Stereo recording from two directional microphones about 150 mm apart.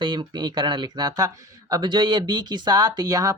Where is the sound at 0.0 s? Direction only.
30° right (ahead or behind).